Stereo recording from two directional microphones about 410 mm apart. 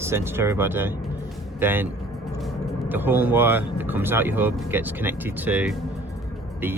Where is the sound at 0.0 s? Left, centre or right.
Centre.